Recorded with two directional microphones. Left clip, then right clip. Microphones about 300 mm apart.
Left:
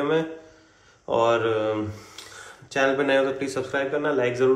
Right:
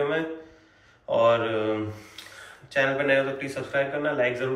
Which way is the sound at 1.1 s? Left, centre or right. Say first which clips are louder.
Even; left.